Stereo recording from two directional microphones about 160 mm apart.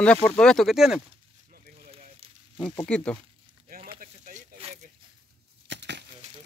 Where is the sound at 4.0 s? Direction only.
50° right (ahead or behind).